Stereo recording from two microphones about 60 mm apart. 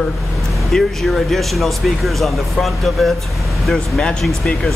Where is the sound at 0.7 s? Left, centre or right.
Centre.